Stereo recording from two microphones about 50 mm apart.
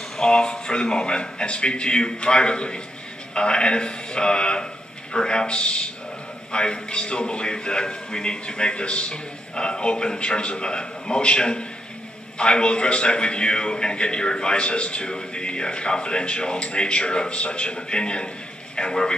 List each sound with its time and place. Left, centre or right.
0.2 s a man's voice: centre